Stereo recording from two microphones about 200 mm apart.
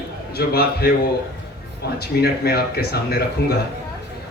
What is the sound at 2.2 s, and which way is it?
A man's voice, 50° left (ahead or behind).